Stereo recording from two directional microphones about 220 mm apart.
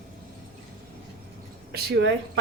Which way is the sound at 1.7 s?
50° right (ahead or behind).